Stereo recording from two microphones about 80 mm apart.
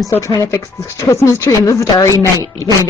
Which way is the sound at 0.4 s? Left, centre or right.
Left.